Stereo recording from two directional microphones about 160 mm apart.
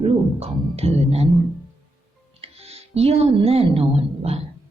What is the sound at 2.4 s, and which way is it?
Speech, 40° right (ahead or behind).